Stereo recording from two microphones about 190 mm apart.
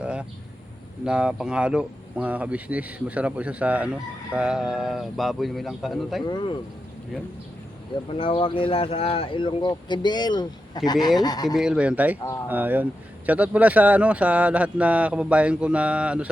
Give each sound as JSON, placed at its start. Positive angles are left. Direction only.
{"t": 0.0, "sound": "a sound", "side_deg": -5}
{"t": 1.0, "sound": "speech", "side_deg": -5}
{"t": 6.2, "sound": "speech", "side_deg": 25}
{"t": 8.2, "sound": "speech", "side_deg": 30}
{"t": 11.4, "sound": "speech", "side_deg": 0}